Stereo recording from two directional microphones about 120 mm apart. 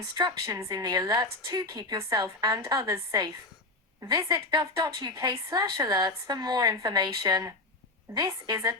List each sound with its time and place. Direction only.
0.4 s a woman's voice: 25° right (ahead or behind)